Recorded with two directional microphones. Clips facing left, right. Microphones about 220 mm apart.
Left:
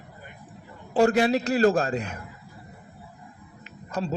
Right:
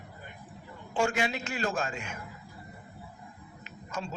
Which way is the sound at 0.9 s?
35° left (ahead or behind).